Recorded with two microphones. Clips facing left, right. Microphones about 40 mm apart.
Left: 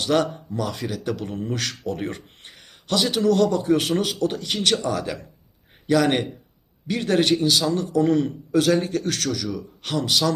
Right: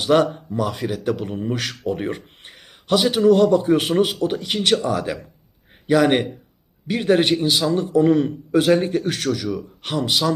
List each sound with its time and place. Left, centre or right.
0.0 s a man's voice: centre